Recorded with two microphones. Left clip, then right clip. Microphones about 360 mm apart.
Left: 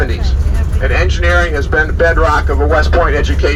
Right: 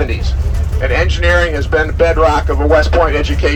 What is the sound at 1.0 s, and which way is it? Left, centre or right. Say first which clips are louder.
Speech: even; right.